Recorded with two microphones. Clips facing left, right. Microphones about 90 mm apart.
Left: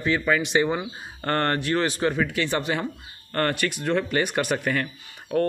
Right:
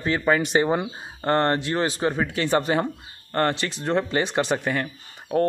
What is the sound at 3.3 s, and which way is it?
A man's voice, 25° right (ahead or behind).